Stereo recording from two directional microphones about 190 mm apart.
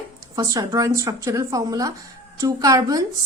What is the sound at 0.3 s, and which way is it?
A woman's voice, 20° right (ahead or behind).